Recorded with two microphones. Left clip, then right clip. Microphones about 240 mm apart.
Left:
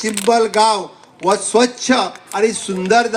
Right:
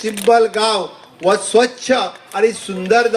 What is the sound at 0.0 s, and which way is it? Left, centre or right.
A man's voice, left.